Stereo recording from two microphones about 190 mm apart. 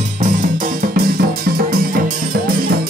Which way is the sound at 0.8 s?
50° right (ahead or behind).